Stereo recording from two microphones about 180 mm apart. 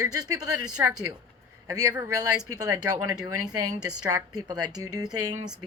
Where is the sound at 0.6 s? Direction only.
5° right (ahead or behind).